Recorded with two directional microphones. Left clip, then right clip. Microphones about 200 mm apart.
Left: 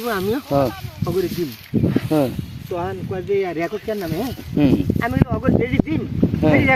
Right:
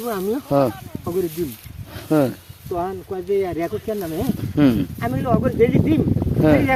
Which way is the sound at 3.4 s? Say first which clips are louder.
Left 1 dB; 5° right (ahead or behind).